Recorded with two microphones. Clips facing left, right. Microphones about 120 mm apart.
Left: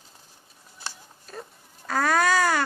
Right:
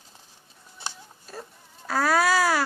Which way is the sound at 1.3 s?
5° right (ahead or behind).